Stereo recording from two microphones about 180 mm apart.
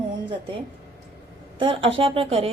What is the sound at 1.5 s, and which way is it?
Speech, 30° right (ahead or behind).